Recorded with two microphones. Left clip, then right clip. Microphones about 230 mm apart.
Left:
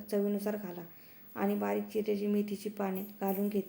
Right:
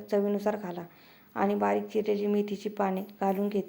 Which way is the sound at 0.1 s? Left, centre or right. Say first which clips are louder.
Right 6 dB; centre.